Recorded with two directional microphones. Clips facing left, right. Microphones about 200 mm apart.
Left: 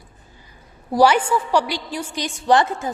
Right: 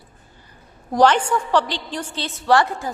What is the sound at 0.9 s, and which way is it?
A woman's voice, 10° left (ahead or behind).